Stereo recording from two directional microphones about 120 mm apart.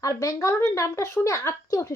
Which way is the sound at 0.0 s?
30° left (ahead or behind).